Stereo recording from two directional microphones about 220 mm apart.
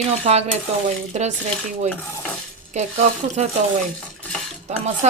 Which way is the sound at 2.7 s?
30° right (ahead or behind).